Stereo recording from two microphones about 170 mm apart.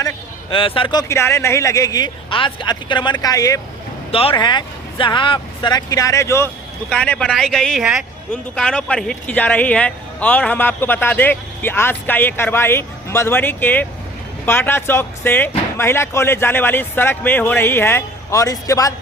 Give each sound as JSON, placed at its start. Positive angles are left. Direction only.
{"t": 0.5, "sound": "speech", "side_deg": 30}
{"t": 4.1, "sound": "speech", "side_deg": 35}